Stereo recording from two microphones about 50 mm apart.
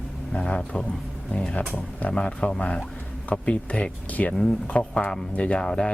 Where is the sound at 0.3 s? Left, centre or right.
Centre.